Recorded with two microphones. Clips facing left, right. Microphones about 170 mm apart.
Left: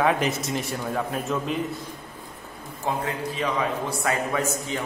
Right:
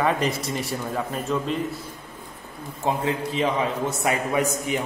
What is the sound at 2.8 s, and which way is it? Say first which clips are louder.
A man's voice: right 3 dB; 25° right (ahead or behind).